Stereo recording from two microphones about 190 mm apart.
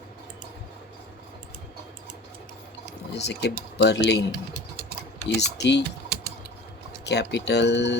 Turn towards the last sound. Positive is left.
turn(degrees=65)  # may be behind; listen again after turning